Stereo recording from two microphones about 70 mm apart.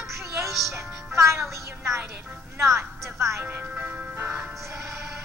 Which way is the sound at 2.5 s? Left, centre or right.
Right.